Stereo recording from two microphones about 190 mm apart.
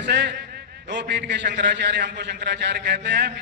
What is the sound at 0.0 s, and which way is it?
A man's voice, 65° right (ahead or behind).